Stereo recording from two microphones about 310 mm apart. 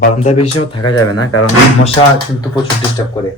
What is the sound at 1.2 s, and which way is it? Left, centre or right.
Speech, left.